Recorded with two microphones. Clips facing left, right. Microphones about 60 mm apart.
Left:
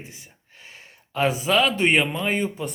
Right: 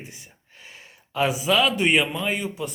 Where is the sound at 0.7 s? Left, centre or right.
Left.